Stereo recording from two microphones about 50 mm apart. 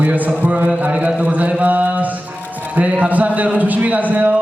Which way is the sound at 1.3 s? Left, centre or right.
Right.